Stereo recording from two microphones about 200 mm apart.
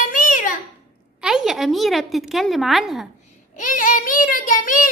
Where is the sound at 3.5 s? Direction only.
40° left (ahead or behind).